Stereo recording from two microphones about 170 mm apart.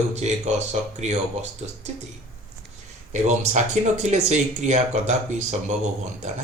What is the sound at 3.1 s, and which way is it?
Speech, 40° right (ahead or behind).